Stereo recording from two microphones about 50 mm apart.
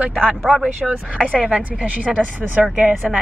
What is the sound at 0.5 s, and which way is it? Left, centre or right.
Speech, right.